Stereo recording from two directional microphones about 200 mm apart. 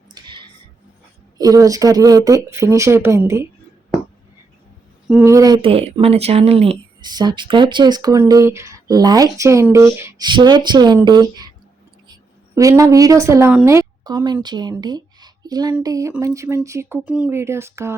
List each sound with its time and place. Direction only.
0.1 s a sound: 20° right (ahead or behind)
1.4 s speech: 15° right (ahead or behind)
5.0 s speech: 5° right (ahead or behind)
5.3 s speech: 15° right (ahead or behind)
5.6 s a woman's voice: 30° right (ahead or behind); by 17.9 s 15° right (ahead or behind)